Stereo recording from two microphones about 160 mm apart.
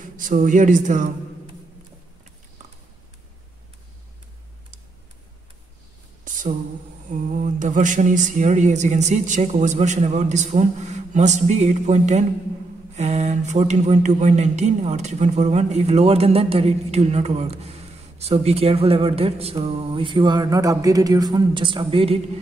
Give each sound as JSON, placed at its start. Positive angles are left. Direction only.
{"t": 0.0, "sound": "a man's voice", "side_deg": -55}
{"t": 6.2, "sound": "a sound", "side_deg": -55}
{"t": 7.1, "sound": "speech", "side_deg": -50}
{"t": 12.9, "sound": "mantra", "side_deg": -45}